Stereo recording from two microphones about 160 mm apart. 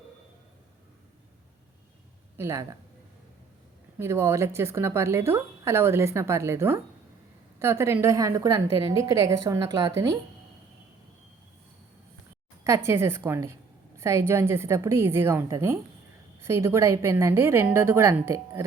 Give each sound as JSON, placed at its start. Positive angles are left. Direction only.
{"t": 2.4, "sound": "a woman's voice", "side_deg": -20}
{"t": 3.9, "sound": "a woman's voice", "side_deg": -15}
{"t": 12.6, "sound": "a woman's voice", "side_deg": -15}